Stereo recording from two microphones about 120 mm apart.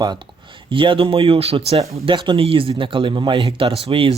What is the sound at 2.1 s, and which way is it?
Speech, 40° right (ahead or behind).